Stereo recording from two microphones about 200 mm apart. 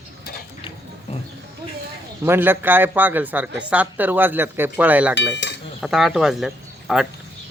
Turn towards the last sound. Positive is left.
turn(degrees=0)  # may be behind; listen again after turning